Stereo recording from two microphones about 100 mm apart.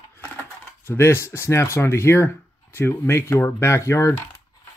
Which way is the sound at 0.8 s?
25° left (ahead or behind).